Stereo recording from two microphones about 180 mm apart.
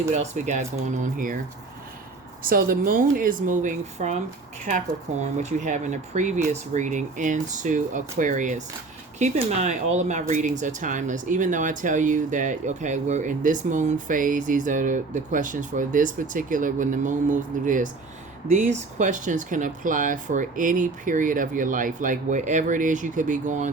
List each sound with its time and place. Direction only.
0.1 s speech: 40° right (ahead or behind)
2.4 s speech: 50° right (ahead or behind)
5.2 s speech: 40° right (ahead or behind)